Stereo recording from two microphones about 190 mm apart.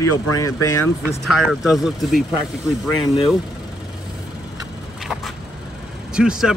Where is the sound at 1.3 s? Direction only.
Centre (ahead or behind).